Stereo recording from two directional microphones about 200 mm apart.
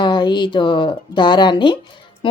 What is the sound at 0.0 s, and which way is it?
Speech, 20° left (ahead or behind).